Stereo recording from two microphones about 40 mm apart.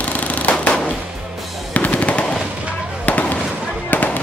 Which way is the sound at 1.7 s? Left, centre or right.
Left.